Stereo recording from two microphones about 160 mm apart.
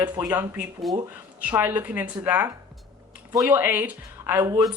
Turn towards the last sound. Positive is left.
turn(degrees=-20)  # may be behind; listen again after turning